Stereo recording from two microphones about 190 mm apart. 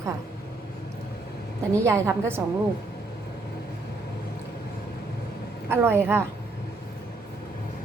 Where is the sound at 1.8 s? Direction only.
15° right (ahead or behind).